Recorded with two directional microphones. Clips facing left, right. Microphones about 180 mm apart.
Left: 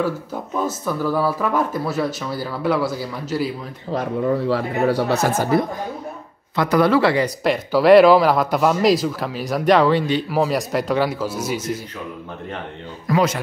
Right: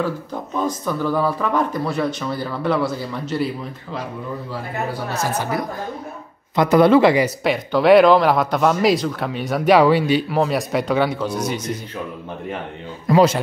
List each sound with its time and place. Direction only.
0.0 s speech: 5° left (ahead or behind)
3.9 s speech: 60° left (ahead or behind)
5.5 s speech: 25° left (ahead or behind)
6.5 s speech: 20° right (ahead or behind)
7.4 s speech: centre (ahead or behind)
10.3 s speech: centre (ahead or behind)
13.0 s speech: 30° right (ahead or behind)